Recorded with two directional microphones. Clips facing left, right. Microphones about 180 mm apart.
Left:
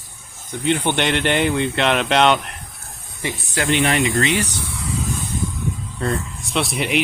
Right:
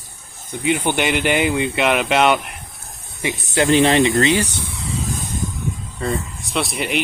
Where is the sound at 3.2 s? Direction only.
25° right (ahead or behind).